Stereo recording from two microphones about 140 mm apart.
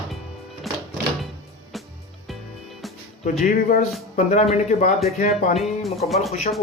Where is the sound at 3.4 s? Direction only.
60° left (ahead or behind).